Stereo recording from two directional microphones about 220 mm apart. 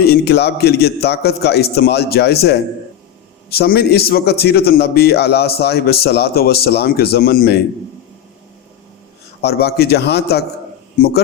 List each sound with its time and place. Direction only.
0.0 s a man's voice: 45° left (ahead or behind)
9.4 s a man's voice: 45° left (ahead or behind)